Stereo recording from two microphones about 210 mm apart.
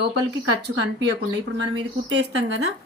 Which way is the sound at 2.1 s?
65° right (ahead or behind).